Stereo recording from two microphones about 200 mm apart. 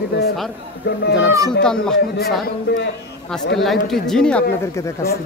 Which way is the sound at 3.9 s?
Centre (ahead or behind).